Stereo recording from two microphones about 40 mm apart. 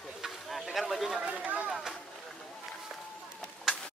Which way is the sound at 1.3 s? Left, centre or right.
Right.